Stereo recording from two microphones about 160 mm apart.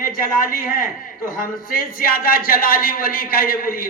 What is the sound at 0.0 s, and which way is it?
A man's voice, 65° left (ahead or behind).